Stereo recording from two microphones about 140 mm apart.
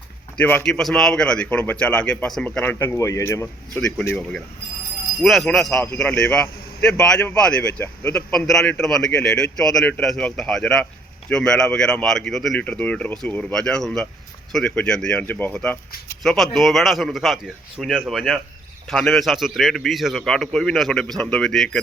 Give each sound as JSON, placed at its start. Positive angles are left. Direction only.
{"t": 0.3, "sound": "a man's voice", "side_deg": 10}
{"t": 2.7, "sound": "speech", "side_deg": 20}
{"t": 3.8, "sound": "a man's voice", "side_deg": 5}
{"t": 5.2, "sound": "a man's voice", "side_deg": 0}
{"t": 5.8, "sound": "a man's voice", "side_deg": 10}